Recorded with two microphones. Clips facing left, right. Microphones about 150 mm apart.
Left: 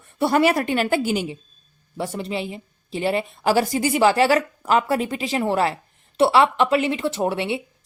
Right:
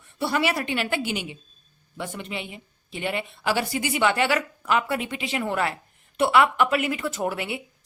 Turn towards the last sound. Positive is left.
turn(degrees=30)  # may be behind; listen again after turning